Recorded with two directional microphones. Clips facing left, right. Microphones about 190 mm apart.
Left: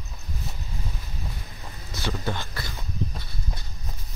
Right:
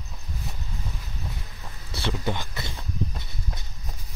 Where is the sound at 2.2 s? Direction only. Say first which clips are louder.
Right 1 dB; 15° right (ahead or behind).